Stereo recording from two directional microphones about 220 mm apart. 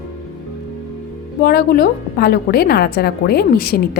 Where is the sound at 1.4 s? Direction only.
45° left (ahead or behind).